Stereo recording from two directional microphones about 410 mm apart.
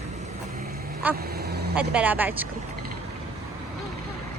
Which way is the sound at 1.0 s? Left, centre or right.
Centre.